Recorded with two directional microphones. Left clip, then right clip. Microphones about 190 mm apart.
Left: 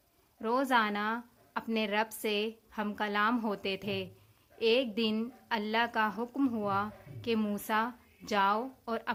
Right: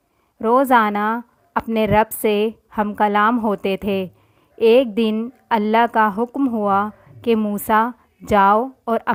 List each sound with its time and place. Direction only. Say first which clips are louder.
0.3 s a woman's voice: right 14 dB; 40° right (ahead or behind)